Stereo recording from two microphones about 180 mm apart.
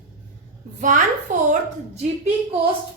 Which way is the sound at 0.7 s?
45° right (ahead or behind).